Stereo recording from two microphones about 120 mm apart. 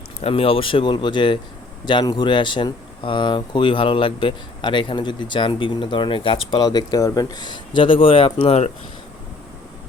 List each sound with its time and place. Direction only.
0.2 s speech: 50° left (ahead or behind)